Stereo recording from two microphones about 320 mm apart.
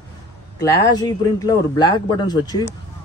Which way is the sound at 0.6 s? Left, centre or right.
Centre.